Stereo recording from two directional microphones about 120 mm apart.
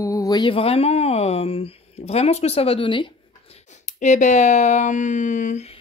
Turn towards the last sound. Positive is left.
turn(degrees=70)  # may be behind; listen again after turning